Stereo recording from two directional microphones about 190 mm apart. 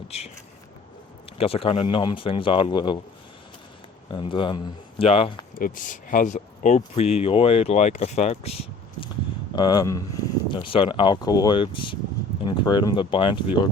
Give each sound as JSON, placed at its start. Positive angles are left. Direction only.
{"t": 0.1, "sound": "speech", "side_deg": 35}
{"t": 1.4, "sound": "speech", "side_deg": 30}
{"t": 4.1, "sound": "speech", "side_deg": 25}
{"t": 5.5, "sound": "speech", "side_deg": 45}
{"t": 9.6, "sound": "speech", "side_deg": 20}